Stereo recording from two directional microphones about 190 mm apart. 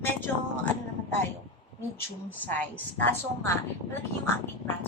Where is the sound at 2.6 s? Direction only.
10° left (ahead or behind).